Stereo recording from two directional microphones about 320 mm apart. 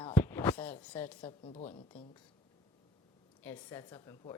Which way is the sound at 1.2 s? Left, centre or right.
Centre.